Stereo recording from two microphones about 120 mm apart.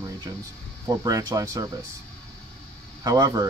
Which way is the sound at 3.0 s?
30° right (ahead or behind).